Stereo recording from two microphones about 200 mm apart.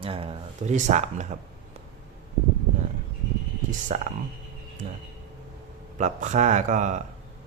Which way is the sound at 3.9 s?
35° right (ahead or behind).